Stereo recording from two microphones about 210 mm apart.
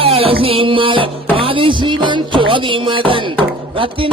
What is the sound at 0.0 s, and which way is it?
Music, 25° right (ahead or behind).